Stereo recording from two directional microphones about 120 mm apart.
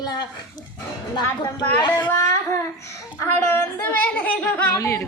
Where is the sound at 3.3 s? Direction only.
15° left (ahead or behind).